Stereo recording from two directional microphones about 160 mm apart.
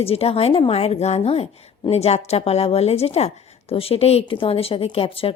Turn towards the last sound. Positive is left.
turn(degrees=35)  # may be behind; listen again after turning